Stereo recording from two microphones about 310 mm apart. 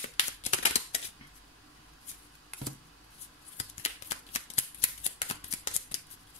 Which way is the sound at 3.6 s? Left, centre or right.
Left.